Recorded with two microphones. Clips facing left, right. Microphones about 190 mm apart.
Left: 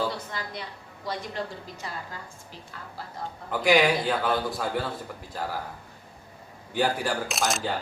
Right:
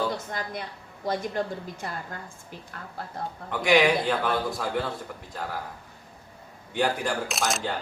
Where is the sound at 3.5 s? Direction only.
5° left (ahead or behind).